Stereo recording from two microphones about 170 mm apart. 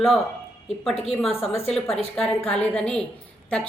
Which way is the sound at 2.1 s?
5° left (ahead or behind).